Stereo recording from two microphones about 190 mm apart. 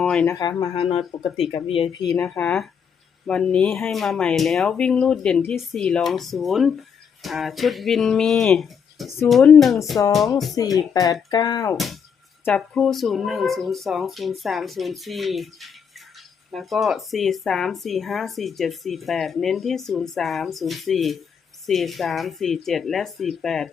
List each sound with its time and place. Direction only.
0.0 s speech: 5° left (ahead or behind)
0.3 s speech: 20° left (ahead or behind)
2.1 s speech: 5° left (ahead or behind)
10.9 s speech: 20° left (ahead or behind)
11.7 s speech: centre (ahead or behind)